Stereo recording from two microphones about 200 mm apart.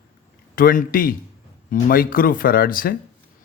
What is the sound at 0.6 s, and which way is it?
Speech, 45° left (ahead or behind).